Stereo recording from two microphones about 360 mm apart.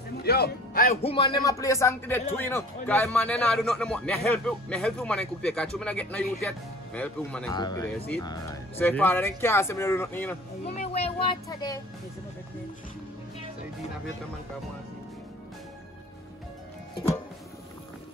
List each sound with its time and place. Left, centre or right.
0.2 s speech: left; by 10.3 s centre
10.6 s speech: centre